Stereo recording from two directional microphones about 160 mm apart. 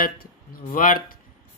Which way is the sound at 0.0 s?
60° left (ahead or behind).